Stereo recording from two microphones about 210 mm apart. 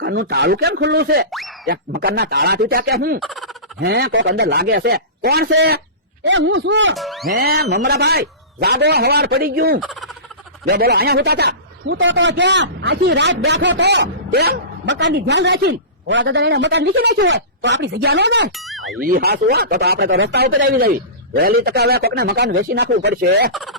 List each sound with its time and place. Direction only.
0.0 s a man's voice: 55° right (ahead or behind)
1.3 s speech: centre (ahead or behind)
1.6 s a man's voice: 50° right (ahead or behind)
3.2 s fowl: centre (ahead or behind)
3.8 s a man's voice: 50° right (ahead or behind)
6.9 s music: centre (ahead or behind)
7.3 s a man's voice: 45° right (ahead or behind)
9.8 s fowl: centre (ahead or behind)
10.7 s a man's voice: 45° right (ahead or behind)
14.3 s a man's voice: 45° right (ahead or behind)
18.5 s boing: centre (ahead or behind)
18.9 s a man's voice: 45° right (ahead or behind)
20.7 s a man's voice: 45° right (ahead or behind)
23.5 s fowl: centre (ahead or behind)